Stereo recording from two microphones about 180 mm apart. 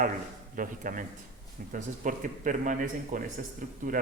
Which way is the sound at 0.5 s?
50° right (ahead or behind).